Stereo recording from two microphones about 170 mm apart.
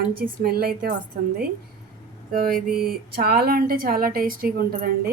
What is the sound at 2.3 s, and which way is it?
A woman's voice, 60° right (ahead or behind).